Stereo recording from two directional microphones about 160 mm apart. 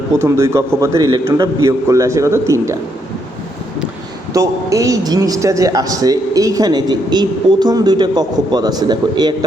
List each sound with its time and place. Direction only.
0.3 s a man's voice: 20° right (ahead or behind)
4.4 s a man's voice: 20° right (ahead or behind)